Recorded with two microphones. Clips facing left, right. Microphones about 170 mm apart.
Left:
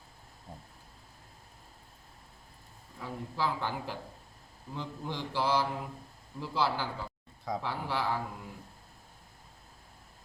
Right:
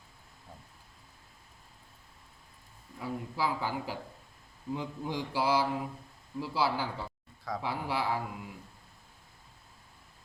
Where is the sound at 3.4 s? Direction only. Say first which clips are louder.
Even; 5° right (ahead or behind).